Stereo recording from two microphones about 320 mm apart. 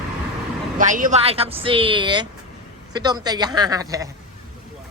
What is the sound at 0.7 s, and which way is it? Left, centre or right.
Speech, right.